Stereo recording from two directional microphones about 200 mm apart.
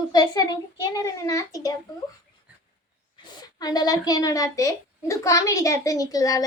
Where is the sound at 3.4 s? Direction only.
20° left (ahead or behind).